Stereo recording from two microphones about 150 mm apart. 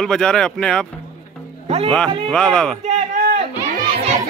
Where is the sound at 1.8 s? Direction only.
5° left (ahead or behind).